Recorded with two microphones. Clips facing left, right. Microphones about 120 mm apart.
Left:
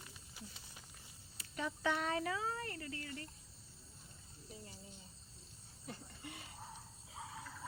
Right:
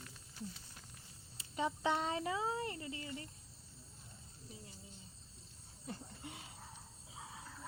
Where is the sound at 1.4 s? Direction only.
25° right (ahead or behind).